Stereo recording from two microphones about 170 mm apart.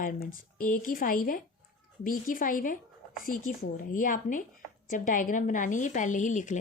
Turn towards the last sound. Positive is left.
turn(degrees=50)  # may be behind; listen again after turning